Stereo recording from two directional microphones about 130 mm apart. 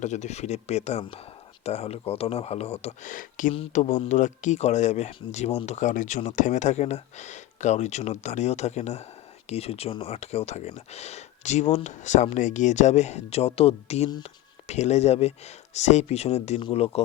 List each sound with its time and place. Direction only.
0.0 s speech: 65° left (ahead or behind)
3.0 s speech: 90° left
3.7 s speech: 65° left (ahead or behind)